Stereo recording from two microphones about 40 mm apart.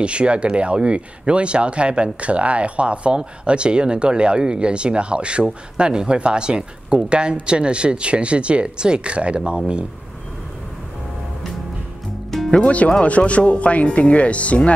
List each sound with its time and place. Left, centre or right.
0.0 s speech: right
12.4 s speech: left